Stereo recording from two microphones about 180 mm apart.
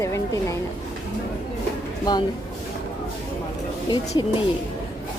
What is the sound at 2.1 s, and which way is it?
Speech, 20° left (ahead or behind).